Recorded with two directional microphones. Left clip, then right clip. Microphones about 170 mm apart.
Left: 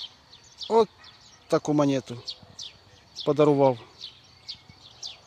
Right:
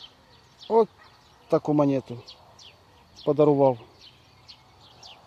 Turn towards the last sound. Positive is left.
turn(degrees=5)  # may be behind; listen again after turning